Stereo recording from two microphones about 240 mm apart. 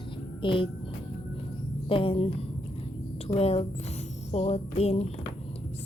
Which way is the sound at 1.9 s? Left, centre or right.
Left.